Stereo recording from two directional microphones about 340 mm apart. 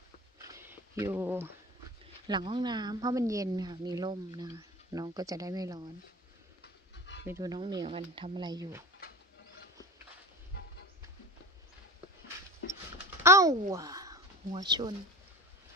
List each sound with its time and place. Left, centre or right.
0.5 s a sound: centre
2.2 s a woman's voice: centre
6.6 s a sound: left
7.2 s a woman's voice: centre
12.9 s babbling: centre
13.7 s speech: centre